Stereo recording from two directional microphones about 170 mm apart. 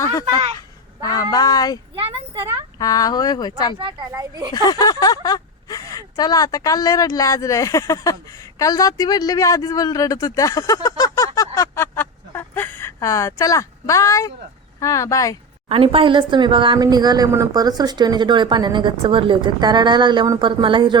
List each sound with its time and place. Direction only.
0.0 s a sound: 20° left (ahead or behind)
1.1 s speech: 20° left (ahead or behind)
2.0 s a sound: 35° right (ahead or behind)
2.7 s speech: 20° left (ahead or behind)
3.8 s speech: 30° right (ahead or behind)
4.5 s speech: 25° left (ahead or behind)
11.3 s a sound: 20° left (ahead or behind)
14.8 s speech: 20° left (ahead or behind)
15.7 s speech: 35° right (ahead or behind)